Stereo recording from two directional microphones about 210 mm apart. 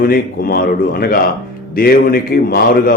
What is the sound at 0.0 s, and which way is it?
Speech, 45° left (ahead or behind).